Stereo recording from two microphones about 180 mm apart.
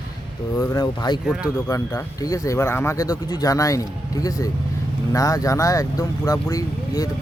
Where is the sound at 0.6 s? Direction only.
20° left (ahead or behind).